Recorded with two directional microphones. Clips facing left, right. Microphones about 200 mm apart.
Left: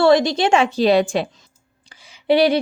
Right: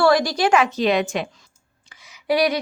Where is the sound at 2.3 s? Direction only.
30° left (ahead or behind).